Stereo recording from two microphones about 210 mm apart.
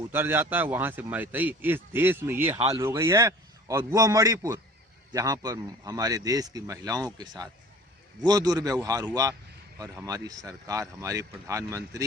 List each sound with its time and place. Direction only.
0.1 s a man's voice: 10° right (ahead or behind)